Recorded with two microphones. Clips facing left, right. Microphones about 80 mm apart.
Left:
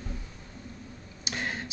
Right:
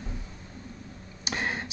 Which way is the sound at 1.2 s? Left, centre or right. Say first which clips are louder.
Right 3 dB; right.